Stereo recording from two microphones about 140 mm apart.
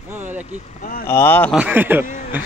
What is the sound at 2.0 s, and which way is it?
Speech, 55° left (ahead or behind).